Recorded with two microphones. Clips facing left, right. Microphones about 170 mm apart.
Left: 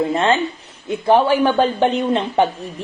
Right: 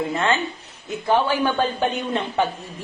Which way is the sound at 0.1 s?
30° left (ahead or behind).